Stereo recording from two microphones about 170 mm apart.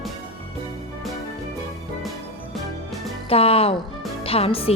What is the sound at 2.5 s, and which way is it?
Music, centre (ahead or behind).